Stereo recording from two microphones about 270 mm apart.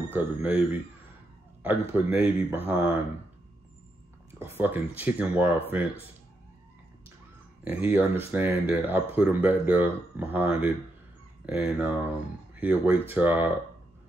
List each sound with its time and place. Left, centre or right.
0.1 s speech: centre
1.6 s speech: centre
4.4 s speech: centre
7.6 s speech: centre
10.4 s speech: left
11.4 s speech: centre